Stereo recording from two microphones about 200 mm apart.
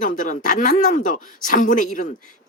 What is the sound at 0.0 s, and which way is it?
Speech, 40° left (ahead or behind).